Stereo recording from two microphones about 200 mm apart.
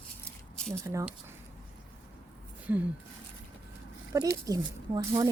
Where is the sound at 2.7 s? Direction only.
10° right (ahead or behind).